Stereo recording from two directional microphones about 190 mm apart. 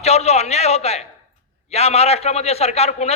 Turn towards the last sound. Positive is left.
turn(degrees=35)  # may be behind; listen again after turning